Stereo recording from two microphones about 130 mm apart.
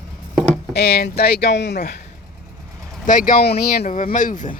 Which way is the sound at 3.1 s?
90° left.